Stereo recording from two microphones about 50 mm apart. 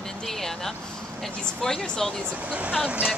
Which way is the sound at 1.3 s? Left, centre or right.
Centre.